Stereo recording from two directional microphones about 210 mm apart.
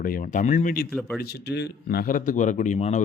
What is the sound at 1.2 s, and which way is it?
Speech, 50° left (ahead or behind).